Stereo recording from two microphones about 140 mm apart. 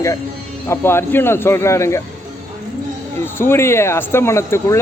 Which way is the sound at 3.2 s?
15° left (ahead or behind).